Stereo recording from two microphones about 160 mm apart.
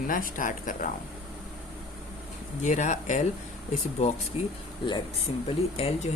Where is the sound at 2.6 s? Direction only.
50° left (ahead or behind).